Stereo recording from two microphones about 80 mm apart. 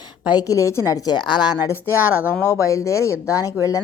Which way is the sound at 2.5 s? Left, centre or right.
Left.